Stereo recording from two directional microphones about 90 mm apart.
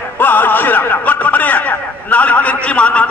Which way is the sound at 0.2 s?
20° left (ahead or behind).